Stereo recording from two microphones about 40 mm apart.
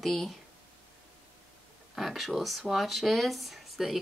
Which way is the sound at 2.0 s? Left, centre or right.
Centre.